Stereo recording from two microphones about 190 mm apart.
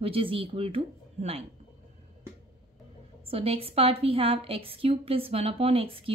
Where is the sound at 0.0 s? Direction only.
30° right (ahead or behind).